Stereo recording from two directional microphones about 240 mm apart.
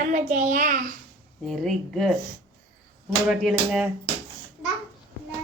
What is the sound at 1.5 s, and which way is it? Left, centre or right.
Speech, centre.